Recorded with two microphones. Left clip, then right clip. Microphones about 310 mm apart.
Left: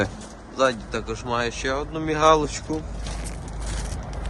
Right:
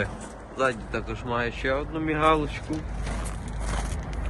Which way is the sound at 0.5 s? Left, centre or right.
Centre.